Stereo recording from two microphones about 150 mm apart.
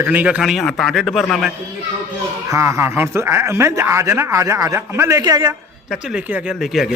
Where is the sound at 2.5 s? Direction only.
20° right (ahead or behind).